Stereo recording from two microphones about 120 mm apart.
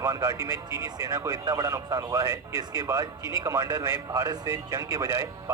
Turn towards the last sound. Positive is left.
turn(degrees=-25)  # may be behind; listen again after turning